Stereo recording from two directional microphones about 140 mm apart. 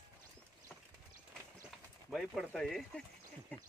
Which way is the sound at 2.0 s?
Centre (ahead or behind).